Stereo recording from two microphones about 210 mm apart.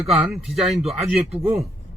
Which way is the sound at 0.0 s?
Centre (ahead or behind).